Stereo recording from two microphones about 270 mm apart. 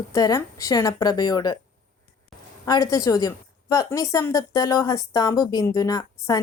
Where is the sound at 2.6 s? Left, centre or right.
Centre.